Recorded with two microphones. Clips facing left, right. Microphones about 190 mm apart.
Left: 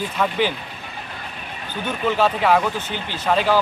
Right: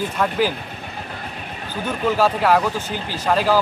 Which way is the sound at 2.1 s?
5° right (ahead or behind).